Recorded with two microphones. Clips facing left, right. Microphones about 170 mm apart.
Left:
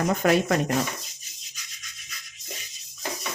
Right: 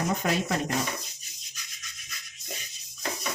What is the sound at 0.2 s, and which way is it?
Speech, 65° left (ahead or behind).